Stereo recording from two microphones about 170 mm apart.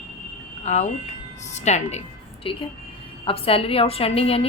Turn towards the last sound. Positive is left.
turn(degrees=35)  # may be behind; listen again after turning